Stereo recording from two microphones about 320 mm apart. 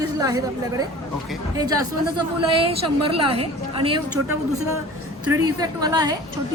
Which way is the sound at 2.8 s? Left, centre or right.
Right.